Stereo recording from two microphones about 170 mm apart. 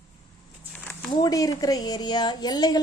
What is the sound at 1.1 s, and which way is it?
A woman's voice, 20° left (ahead or behind).